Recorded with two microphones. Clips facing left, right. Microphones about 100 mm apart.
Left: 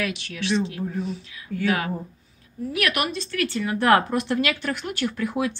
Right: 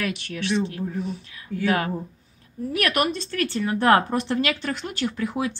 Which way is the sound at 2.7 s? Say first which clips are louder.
Right 2 dB; 40° right (ahead or behind).